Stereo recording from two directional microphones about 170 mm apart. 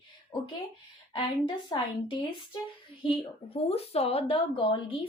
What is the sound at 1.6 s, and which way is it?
A woman's voice, 30° left (ahead or behind).